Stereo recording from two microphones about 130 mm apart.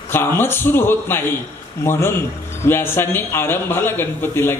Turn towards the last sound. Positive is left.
turn(degrees=15)  # may be behind; listen again after turning